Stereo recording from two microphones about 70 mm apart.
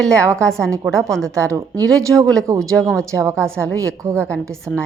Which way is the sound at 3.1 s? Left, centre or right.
Right.